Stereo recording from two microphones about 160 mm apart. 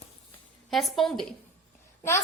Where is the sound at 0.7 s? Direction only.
Centre (ahead or behind).